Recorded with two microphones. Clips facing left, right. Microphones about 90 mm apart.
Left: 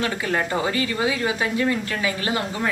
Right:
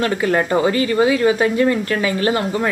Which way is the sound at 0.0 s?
50° right (ahead or behind).